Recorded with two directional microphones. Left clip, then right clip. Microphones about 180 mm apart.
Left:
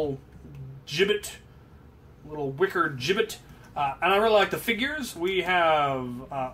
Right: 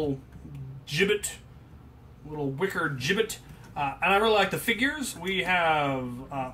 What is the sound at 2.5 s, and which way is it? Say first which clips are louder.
Speech: left 5 dB; 35° left (ahead or behind).